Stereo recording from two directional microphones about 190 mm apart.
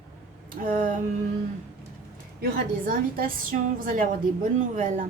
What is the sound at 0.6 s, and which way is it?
Speech, 45° right (ahead or behind).